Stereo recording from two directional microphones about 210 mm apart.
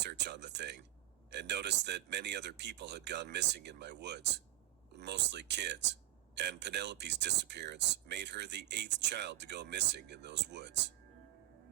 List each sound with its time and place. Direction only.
0.0 s speech: 55° right (ahead or behind)